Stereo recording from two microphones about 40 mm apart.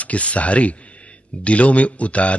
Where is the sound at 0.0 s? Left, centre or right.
Left.